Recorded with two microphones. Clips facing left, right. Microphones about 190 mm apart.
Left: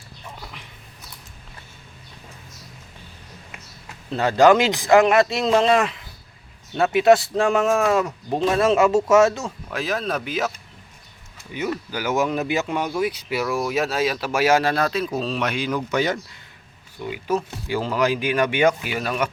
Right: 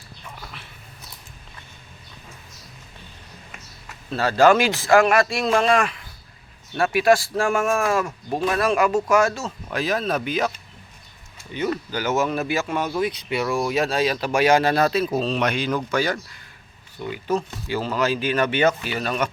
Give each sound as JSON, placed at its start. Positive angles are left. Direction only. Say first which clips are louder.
{"t": 0.4, "sound": "a sound", "louder": "left 1 dB", "side_deg": 15}
{"t": 4.1, "sound": "speech", "louder": "left 1 dB", "side_deg": 20}
{"t": 9.7, "sound": "speech", "louder": "right 2 dB", "side_deg": 0}
{"t": 11.5, "sound": "speech", "louder": "right 1 dB", "side_deg": 10}
{"t": 16.0, "sound": "speech", "louder": "left 1 dB", "side_deg": 20}
{"t": 17.1, "sound": "speech", "louder": "even", "side_deg": 10}